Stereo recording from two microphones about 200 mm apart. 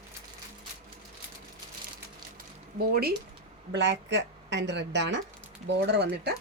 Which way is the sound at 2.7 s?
50° right (ahead or behind).